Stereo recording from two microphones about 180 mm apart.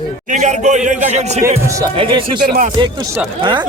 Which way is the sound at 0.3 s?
40° right (ahead or behind).